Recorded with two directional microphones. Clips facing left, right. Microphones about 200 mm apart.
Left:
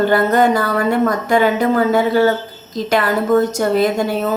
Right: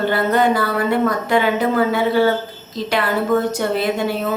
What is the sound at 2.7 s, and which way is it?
A woman's voice, 45° left (ahead or behind).